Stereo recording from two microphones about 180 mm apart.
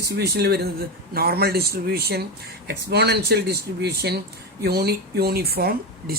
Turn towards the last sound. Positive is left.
turn(degrees=-60)  # may be behind; listen again after turning